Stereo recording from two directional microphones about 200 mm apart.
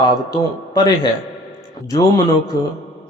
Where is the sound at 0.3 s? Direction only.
20° left (ahead or behind).